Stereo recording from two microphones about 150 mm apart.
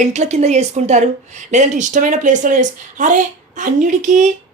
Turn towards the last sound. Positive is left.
turn(degrees=-55)  # may be behind; listen again after turning